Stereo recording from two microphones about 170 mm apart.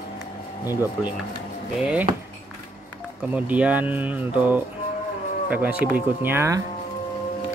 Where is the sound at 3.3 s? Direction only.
10° right (ahead or behind).